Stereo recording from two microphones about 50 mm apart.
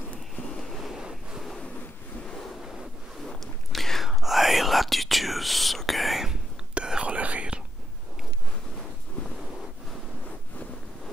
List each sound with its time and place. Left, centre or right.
0.4 s vehicle: centre
0.7 s waves: centre
3.7 s whispering: centre
6.7 s whispering: centre